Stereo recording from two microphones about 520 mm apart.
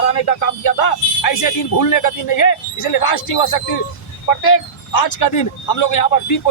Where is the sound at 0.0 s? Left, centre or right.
Left.